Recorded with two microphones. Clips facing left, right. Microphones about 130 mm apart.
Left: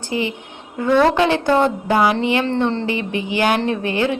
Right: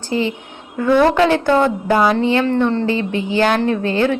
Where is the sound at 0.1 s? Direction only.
15° left (ahead or behind).